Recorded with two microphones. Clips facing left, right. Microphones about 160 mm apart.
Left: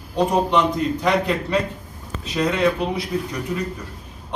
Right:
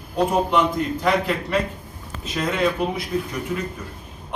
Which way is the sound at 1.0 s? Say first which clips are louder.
Even; centre (ahead or behind).